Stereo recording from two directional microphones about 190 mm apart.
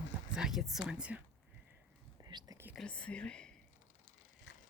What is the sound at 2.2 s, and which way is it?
Whispering, 20° right (ahead or behind).